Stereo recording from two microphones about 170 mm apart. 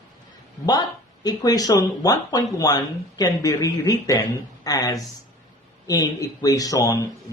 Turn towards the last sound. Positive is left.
turn(degrees=20)  # may be behind; listen again after turning